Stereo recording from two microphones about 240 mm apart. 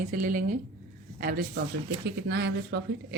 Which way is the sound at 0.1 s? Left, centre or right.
Right.